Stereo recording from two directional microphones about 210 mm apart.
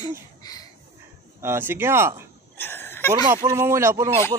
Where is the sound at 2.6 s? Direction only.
10° left (ahead or behind).